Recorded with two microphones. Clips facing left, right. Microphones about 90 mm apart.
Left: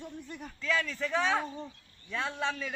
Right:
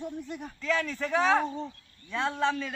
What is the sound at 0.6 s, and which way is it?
Speech, 40° right (ahead or behind).